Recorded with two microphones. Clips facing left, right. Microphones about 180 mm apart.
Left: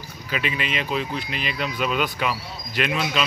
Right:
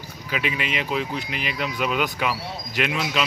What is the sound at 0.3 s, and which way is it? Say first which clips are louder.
A man's voice: even; 15° right (ahead or behind).